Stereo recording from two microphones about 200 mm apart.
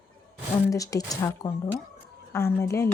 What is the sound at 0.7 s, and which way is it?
Speech, 15° left (ahead or behind).